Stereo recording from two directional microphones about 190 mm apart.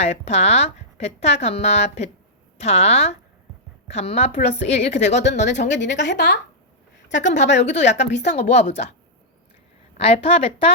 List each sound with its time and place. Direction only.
0.0 s speech: 35° left (ahead or behind)
5.5 s a woman's voice: 65° left (ahead or behind)
7.3 s speech: 40° left (ahead or behind)
7.9 s speech: 65° left (ahead or behind)
8.3 s speech: 35° left (ahead or behind)
10.0 s speech: 30° left (ahead or behind)